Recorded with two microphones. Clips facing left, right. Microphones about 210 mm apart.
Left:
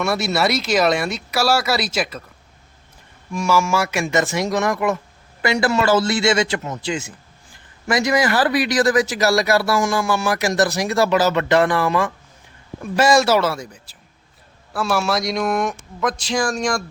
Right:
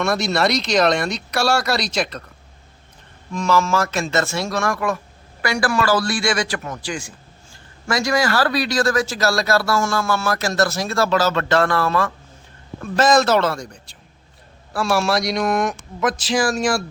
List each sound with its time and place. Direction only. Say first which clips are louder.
0.0 s speech: even; 5° left (ahead or behind)
3.3 s a man's voice: even; 10° left (ahead or behind); by 16.8 s 5° right (ahead or behind)